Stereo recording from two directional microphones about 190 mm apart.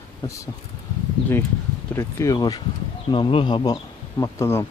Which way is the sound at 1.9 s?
15° left (ahead or behind).